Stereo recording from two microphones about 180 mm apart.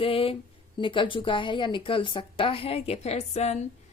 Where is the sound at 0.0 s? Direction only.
30° left (ahead or behind).